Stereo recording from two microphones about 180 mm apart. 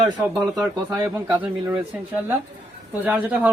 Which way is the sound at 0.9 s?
5° right (ahead or behind).